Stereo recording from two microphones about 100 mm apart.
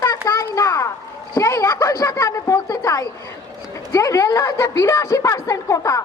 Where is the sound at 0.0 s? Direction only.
40° left (ahead or behind).